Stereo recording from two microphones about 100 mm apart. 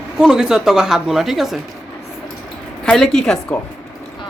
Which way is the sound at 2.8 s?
5° left (ahead or behind).